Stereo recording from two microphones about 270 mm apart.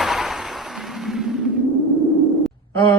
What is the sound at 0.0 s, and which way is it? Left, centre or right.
Music, centre.